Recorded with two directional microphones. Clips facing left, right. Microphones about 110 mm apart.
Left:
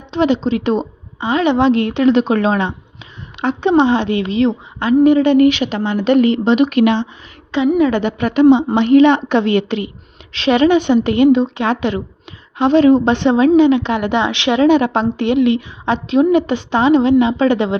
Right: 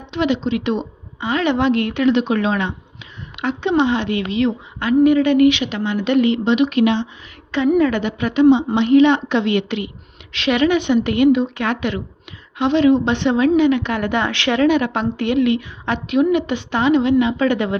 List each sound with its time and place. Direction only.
0.1 s a woman's voice: 35° left (ahead or behind)
1.2 s a woman's voice: 20° left (ahead or behind)
5.5 s a woman's voice: 40° left (ahead or behind)
6.7 s speech: 55° left (ahead or behind)
7.8 s a woman's voice: 25° left (ahead or behind)
8.0 s a woman's voice: 50° left (ahead or behind); by 12.0 s 30° left (ahead or behind)
12.5 s a woman's voice: 40° left (ahead or behind)